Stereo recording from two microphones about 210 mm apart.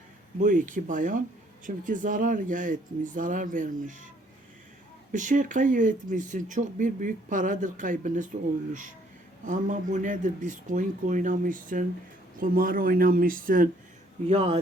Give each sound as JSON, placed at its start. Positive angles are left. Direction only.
{"t": 0.3, "sound": "speech", "side_deg": -40}
{"t": 5.1, "sound": "speech", "side_deg": -40}
{"t": 9.5, "sound": "speech", "side_deg": -35}
{"t": 14.3, "sound": "speech", "side_deg": -30}